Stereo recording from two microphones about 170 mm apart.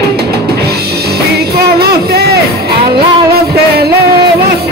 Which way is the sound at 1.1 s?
70° right (ahead or behind).